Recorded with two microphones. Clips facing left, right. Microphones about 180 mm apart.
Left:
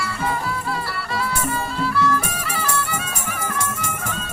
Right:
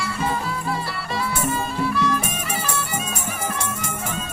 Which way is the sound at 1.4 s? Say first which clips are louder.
Right 1 dB; 20° right (ahead or behind).